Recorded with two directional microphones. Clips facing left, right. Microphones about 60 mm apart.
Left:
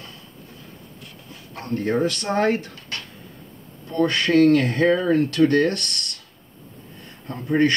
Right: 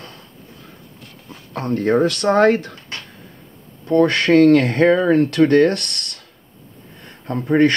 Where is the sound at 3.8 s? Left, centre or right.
Right.